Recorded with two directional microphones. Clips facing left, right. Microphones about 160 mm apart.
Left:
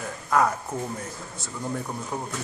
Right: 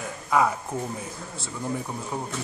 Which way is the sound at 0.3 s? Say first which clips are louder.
Even; 5° right (ahead or behind).